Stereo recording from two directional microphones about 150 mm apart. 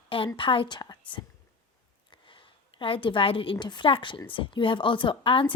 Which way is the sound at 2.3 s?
35° left (ahead or behind).